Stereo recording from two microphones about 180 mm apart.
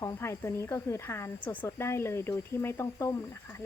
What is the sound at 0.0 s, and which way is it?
Speech, 15° left (ahead or behind).